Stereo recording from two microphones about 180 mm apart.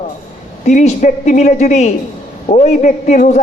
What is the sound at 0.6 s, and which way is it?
A man's voice, 40° left (ahead or behind).